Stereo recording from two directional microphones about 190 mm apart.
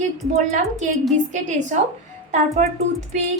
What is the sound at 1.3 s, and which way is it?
A woman's voice, 40° right (ahead or behind).